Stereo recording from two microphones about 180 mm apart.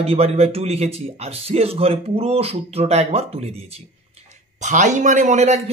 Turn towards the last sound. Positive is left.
turn(degrees=-40)  # may be behind; listen again after turning